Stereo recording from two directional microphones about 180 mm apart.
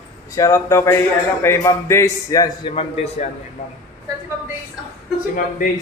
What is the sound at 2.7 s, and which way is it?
Speech, 35° left (ahead or behind).